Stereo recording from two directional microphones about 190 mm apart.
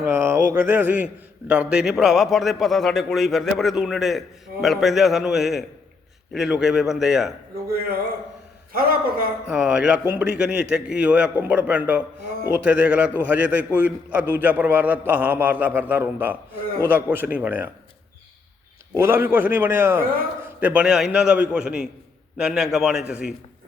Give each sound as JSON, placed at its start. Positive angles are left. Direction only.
{"t": 0.0, "sound": "a man's voice", "side_deg": -10}
{"t": 8.7, "sound": "a man's voice", "side_deg": -50}
{"t": 9.5, "sound": "a man's voice", "side_deg": -5}
{"t": 18.9, "sound": "a man's voice", "side_deg": -10}